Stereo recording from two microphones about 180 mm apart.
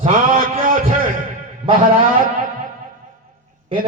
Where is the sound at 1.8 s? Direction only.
50° right (ahead or behind).